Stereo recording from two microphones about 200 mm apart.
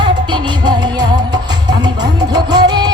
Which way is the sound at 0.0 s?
25° right (ahead or behind).